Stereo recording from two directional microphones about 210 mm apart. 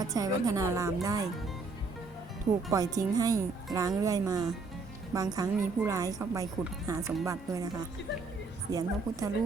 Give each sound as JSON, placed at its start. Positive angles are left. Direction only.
{"t": 0.0, "sound": "a woman's voice", "side_deg": -15}
{"t": 2.7, "sound": "a woman's voice", "side_deg": -15}